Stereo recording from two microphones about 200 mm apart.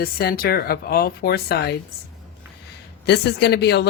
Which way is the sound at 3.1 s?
55° left (ahead or behind).